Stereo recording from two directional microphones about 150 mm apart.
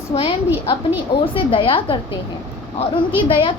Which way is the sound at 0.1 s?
35° left (ahead or behind).